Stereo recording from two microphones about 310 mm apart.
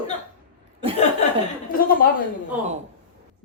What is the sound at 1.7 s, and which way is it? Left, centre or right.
Speech, left.